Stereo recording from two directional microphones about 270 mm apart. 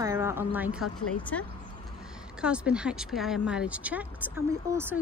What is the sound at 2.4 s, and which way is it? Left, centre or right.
A woman's voice, centre.